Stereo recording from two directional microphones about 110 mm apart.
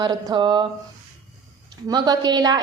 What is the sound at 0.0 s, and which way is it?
Speech, 45° right (ahead or behind).